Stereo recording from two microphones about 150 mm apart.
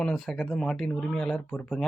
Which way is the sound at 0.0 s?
5° left (ahead or behind).